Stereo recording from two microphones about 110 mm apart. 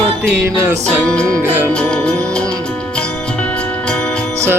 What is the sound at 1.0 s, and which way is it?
Music, 10° left (ahead or behind).